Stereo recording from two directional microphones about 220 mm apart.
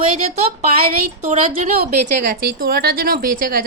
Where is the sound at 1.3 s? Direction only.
30° right (ahead or behind).